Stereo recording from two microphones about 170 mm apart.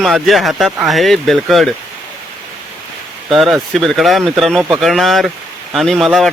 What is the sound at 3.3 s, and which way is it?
Speech, centre (ahead or behind).